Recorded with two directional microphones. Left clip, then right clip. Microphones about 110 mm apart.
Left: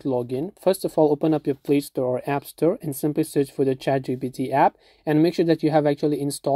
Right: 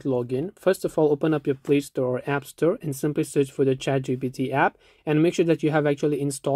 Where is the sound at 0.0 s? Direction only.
25° left (ahead or behind).